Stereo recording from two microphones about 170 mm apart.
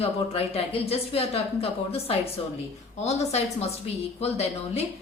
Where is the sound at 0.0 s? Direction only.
35° left (ahead or behind).